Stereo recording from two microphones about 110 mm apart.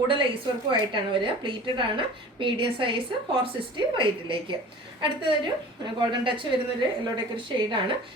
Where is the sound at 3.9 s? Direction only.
50° right (ahead or behind).